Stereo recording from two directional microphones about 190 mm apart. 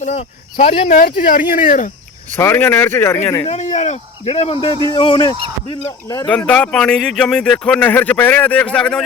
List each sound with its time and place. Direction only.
0.0 s speech: 35° left (ahead or behind)
2.3 s speech: 10° left (ahead or behind)
3.4 s speech: 35° left (ahead or behind); by 6.3 s 15° left (ahead or behind)
6.3 s speech: 5° left (ahead or behind)